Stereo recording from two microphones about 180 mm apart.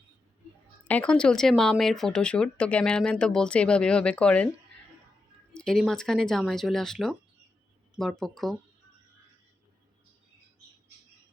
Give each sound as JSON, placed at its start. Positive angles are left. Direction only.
{"t": 0.9, "sound": "speech", "side_deg": 5}
{"t": 5.5, "sound": "speech", "side_deg": 0}